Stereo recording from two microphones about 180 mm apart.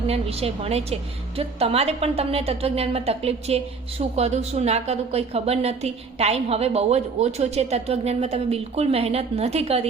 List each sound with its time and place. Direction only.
0.1 s a woman's voice: 35° right (ahead or behind)